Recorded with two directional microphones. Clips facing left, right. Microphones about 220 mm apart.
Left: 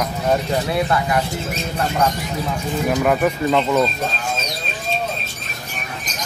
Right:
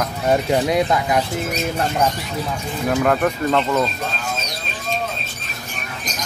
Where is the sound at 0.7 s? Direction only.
15° right (ahead or behind).